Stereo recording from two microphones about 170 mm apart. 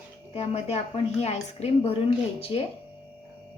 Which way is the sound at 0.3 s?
40° left (ahead or behind).